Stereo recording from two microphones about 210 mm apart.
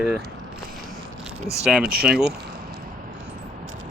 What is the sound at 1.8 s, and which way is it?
Speech, 45° right (ahead or behind).